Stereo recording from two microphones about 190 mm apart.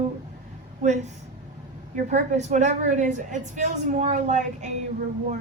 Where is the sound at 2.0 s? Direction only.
40° right (ahead or behind).